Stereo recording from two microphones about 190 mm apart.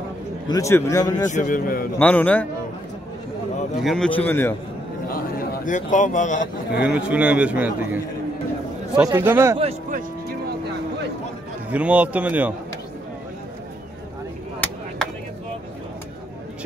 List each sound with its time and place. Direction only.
0.5 s speech: 15° left (ahead or behind)
1.3 s a man's voice: 45° left (ahead or behind)
2.0 s speech: 5° left (ahead or behind)
3.8 s speech: 5° left (ahead or behind)
5.1 s a man's voice: 45° left (ahead or behind)
6.8 s a man's voice: 5° right (ahead or behind)
9.6 s music: 35° right (ahead or behind)
11.7 s a man's voice: 5° right (ahead or behind)
15.0 s a sound: 5° left (ahead or behind)